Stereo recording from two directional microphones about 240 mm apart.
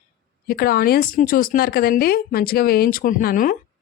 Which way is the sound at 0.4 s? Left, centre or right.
Left.